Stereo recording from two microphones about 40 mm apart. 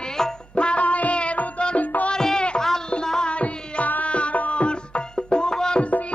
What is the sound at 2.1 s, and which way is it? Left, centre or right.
Music, centre.